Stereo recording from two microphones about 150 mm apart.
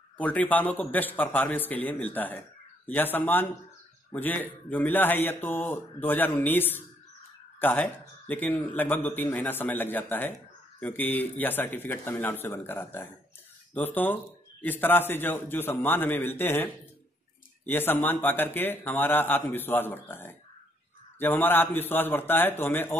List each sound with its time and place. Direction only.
0.2 s speech: 10° left (ahead or behind)